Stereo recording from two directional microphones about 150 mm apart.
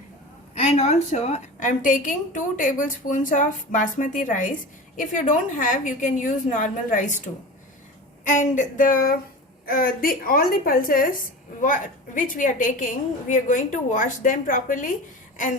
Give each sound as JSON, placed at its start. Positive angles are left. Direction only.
{"t": 0.5, "sound": "a woman's voice", "side_deg": 45}
{"t": 8.3, "sound": "a woman's voice", "side_deg": 55}